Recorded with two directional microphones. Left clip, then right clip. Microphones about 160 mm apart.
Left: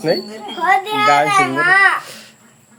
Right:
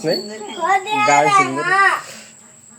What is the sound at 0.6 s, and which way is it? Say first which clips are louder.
A child's voice: left 2 dB; 25° left (ahead or behind).